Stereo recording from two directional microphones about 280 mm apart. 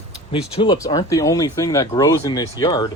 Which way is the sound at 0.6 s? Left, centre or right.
Centre.